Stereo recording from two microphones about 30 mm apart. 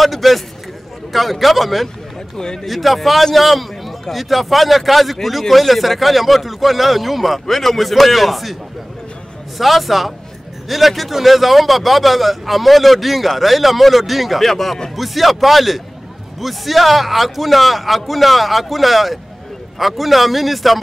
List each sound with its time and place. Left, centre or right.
0.0 s a man's voice: centre
2.3 s speech: left
2.6 s a man's voice: centre
9.6 s a man's voice: centre
14.4 s speech: centre
15.0 s a man's voice: centre